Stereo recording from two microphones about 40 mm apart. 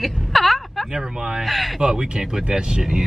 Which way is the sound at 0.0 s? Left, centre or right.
Centre.